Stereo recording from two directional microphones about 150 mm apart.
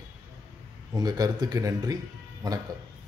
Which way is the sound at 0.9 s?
25° right (ahead or behind).